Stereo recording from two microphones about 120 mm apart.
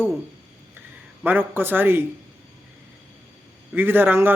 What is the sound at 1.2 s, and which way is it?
Speech, 15° right (ahead or behind).